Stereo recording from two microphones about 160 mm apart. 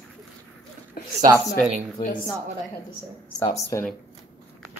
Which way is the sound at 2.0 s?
30° left (ahead or behind).